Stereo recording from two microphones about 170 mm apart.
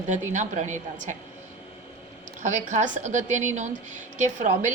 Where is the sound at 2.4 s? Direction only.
45° right (ahead or behind).